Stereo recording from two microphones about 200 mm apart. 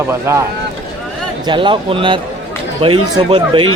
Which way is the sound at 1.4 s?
25° right (ahead or behind).